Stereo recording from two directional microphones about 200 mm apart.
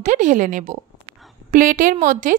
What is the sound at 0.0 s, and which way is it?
A woman's voice, 40° right (ahead or behind).